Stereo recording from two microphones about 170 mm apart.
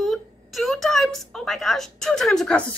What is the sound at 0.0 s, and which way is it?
A woman's voice, centre (ahead or behind).